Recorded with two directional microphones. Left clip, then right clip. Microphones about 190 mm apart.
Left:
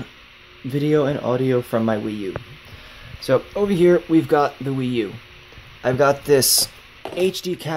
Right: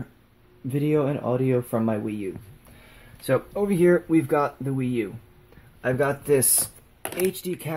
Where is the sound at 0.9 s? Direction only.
5° left (ahead or behind).